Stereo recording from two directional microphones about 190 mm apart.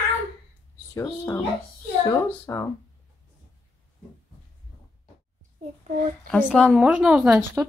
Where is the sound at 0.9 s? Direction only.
15° left (ahead or behind).